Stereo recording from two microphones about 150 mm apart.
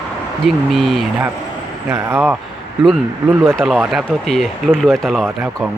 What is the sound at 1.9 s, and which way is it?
Speech, 20° right (ahead or behind).